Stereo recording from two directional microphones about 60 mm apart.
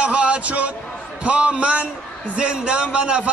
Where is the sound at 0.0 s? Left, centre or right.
Centre.